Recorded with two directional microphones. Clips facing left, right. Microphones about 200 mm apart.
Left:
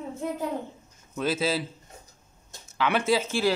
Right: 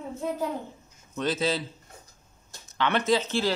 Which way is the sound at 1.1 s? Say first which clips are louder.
Even; 5° left (ahead or behind).